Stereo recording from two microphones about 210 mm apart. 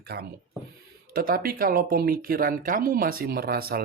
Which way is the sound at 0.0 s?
50° right (ahead or behind).